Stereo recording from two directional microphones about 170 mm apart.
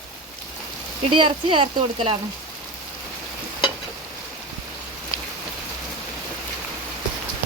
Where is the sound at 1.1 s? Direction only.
30° right (ahead or behind).